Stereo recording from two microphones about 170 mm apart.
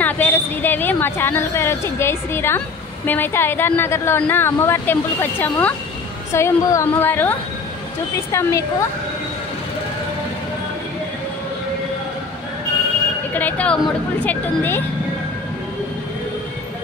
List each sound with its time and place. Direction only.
0.0 s a woman's voice: 10° left (ahead or behind)
13.3 s a woman's voice: 10° left (ahead or behind)